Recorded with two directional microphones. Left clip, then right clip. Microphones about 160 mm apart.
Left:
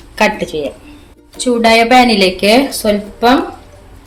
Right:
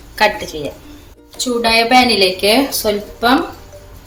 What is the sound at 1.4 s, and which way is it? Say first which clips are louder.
A woman's voice: left 4 dB; 55° left (ahead or behind).